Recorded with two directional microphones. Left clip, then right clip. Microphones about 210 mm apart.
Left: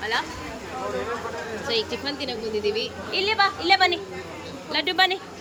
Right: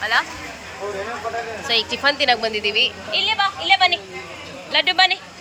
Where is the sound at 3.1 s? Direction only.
20° left (ahead or behind).